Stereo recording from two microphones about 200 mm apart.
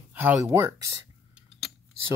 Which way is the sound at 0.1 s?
10° right (ahead or behind).